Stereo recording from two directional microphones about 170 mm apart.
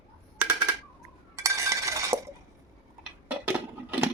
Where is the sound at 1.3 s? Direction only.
15° right (ahead or behind).